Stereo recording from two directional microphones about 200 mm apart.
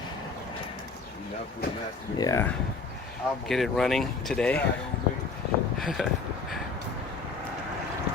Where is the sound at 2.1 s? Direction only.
20° left (ahead or behind).